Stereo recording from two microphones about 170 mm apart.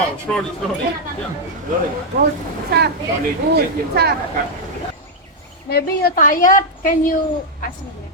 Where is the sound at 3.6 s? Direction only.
70° right (ahead or behind).